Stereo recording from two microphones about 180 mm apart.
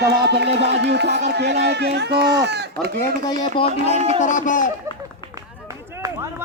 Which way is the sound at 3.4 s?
30° left (ahead or behind).